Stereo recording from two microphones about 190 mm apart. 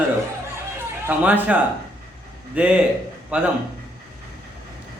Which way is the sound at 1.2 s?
10° right (ahead or behind).